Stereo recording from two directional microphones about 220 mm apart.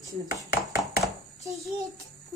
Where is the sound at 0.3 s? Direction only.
15° right (ahead or behind).